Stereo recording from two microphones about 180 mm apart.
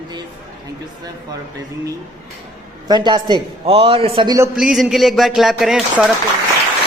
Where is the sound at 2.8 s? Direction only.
25° right (ahead or behind).